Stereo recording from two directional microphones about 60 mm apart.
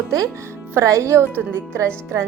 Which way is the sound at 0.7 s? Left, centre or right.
Right.